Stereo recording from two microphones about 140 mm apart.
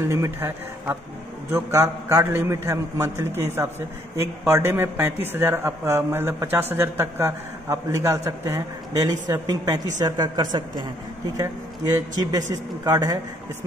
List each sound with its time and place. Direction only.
0.1 s a man's voice: 20° right (ahead or behind)